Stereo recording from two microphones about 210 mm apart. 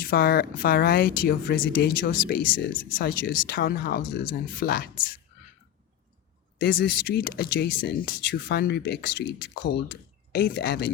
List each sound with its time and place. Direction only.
0.0 s speech: 45° left (ahead or behind)
6.6 s speech: 50° left (ahead or behind)